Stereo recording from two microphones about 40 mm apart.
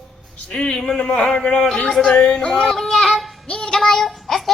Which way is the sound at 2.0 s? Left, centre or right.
Centre.